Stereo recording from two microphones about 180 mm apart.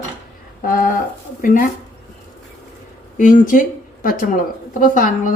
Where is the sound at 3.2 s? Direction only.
45° left (ahead or behind).